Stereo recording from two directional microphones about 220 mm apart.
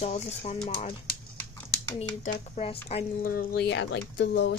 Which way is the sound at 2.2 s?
35° left (ahead or behind).